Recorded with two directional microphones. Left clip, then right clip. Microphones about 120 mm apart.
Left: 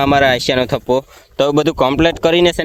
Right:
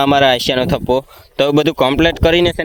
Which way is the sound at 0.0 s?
15° right (ahead or behind).